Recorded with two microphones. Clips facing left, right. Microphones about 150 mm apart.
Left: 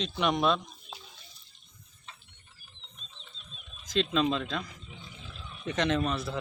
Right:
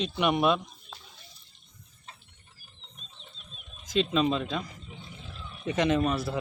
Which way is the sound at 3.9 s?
5° right (ahead or behind).